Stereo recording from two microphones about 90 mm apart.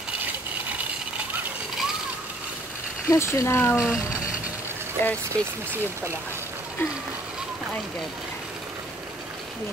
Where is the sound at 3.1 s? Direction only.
35° left (ahead or behind).